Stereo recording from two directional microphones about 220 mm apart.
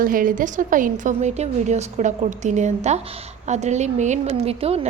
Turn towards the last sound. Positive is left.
turn(degrees=-25)  # may be behind; listen again after turning